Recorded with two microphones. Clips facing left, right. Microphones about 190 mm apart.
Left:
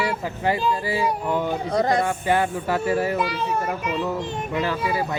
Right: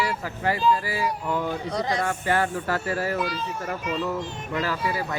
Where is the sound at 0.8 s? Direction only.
25° left (ahead or behind).